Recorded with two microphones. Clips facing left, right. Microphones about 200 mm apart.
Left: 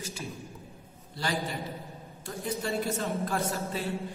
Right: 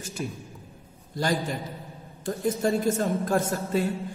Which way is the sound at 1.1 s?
45° right (ahead or behind).